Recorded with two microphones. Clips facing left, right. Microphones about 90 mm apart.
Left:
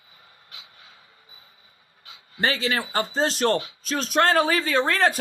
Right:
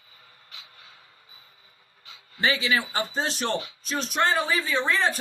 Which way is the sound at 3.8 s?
90° left.